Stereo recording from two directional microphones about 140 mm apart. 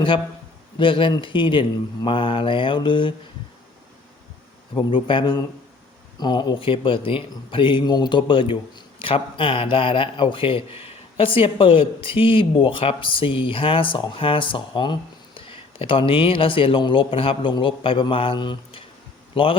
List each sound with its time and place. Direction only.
0.8 s a man's voice: 35° left (ahead or behind)
4.7 s a man's voice: 35° left (ahead or behind)